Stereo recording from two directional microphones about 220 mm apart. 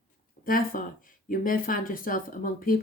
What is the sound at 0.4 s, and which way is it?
Speech, 40° left (ahead or behind).